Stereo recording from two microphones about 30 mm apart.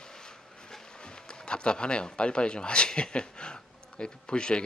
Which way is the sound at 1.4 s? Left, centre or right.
Left.